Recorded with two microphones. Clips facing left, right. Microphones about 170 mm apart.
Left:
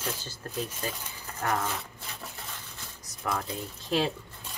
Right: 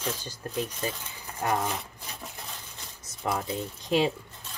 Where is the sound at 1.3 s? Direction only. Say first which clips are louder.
Right 2 dB; 15° right (ahead or behind).